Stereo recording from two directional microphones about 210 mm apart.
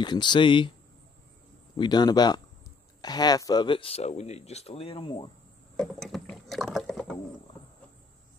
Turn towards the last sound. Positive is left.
turn(degrees=5)  # may be behind; listen again after turning